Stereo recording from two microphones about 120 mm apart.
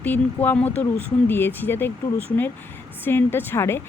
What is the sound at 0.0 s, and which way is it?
Speech, 15° left (ahead or behind).